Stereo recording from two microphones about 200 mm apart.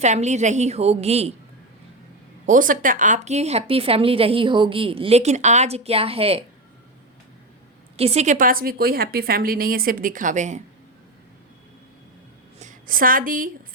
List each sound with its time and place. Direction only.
0.0 s a woman's voice: 35° right (ahead or behind)
2.5 s speech: 40° right (ahead or behind)
7.9 s a woman's voice: 30° right (ahead or behind)
12.5 s a woman's voice: 40° right (ahead or behind)